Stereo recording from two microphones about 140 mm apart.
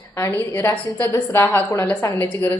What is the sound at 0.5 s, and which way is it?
A woman's voice, 15° left (ahead or behind).